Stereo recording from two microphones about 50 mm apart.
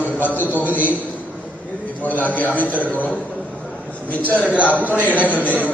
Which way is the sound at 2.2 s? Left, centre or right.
Left.